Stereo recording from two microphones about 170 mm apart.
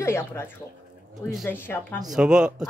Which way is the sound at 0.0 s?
15° left (ahead or behind).